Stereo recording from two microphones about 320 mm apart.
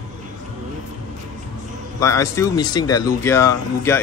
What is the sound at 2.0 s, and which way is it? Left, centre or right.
Speech, centre.